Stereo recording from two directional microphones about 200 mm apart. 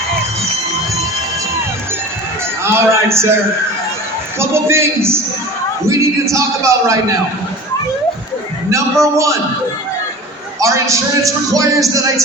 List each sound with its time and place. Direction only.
2.6 s a sound: 15° right (ahead or behind)
4.4 s speech: 10° right (ahead or behind)
8.7 s speech: 15° right (ahead or behind)
10.6 s speech: 15° right (ahead or behind)